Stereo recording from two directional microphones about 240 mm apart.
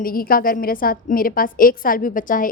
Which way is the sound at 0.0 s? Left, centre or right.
Left.